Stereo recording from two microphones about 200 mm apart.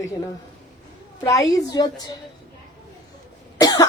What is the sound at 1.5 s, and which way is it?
Speech, 20° left (ahead or behind).